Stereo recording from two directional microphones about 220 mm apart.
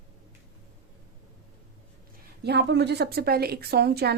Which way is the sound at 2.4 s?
50° right (ahead or behind).